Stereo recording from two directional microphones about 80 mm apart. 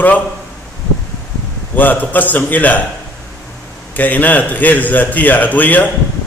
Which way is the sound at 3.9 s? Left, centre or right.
Left.